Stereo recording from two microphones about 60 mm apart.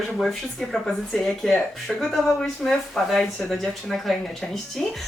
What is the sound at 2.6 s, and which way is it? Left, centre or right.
Speech, left.